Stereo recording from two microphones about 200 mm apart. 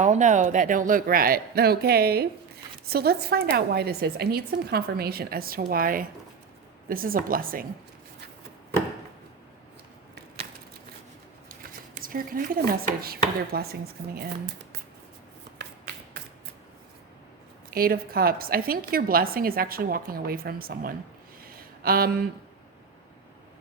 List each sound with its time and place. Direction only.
0.0 s a woman's voice: 35° right (ahead or behind)
11.9 s a woman's voice: 45° right (ahead or behind)
17.7 s a woman's voice: 45° right (ahead or behind)
21.4 s a sound: 50° right (ahead or behind)